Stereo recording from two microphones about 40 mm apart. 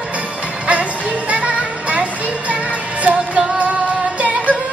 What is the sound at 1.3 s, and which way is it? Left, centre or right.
Music, right.